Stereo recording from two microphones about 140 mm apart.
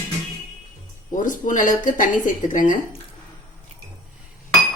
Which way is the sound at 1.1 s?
70° left (ahead or behind).